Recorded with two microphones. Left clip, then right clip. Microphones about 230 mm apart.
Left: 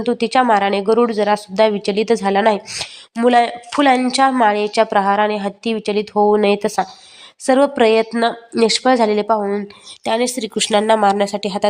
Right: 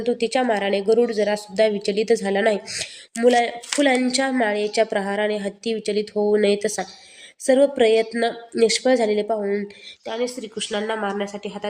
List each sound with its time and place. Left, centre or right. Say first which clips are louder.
0.0 s speech: left 5 dB; centre
10.0 s speech: left 8 dB; left